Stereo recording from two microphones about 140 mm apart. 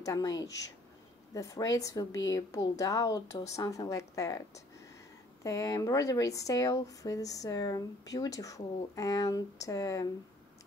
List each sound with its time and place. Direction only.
0.0 s speech: 25° left (ahead or behind)
5.4 s speech: 25° left (ahead or behind)